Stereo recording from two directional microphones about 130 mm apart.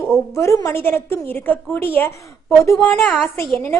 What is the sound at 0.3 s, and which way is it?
A woman's voice, 25° left (ahead or behind).